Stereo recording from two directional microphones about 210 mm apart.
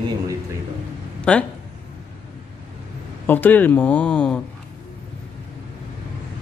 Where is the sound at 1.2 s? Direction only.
5° left (ahead or behind).